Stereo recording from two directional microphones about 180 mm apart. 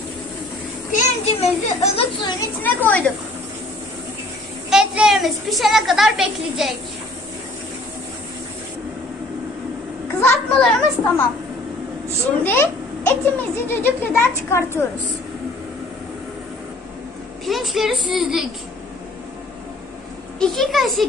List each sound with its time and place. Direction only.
0.9 s a child's voice: 35° left (ahead or behind)
2.6 s a child's voice: 10° left (ahead or behind)
4.6 s a woman's voice: 5° right (ahead or behind)
10.2 s a child's voice: 5° left (ahead or behind)
12.4 s a child's voice: 10° left (ahead or behind)
17.5 s a woman's voice: centre (ahead or behind)
20.3 s a woman's voice: centre (ahead or behind)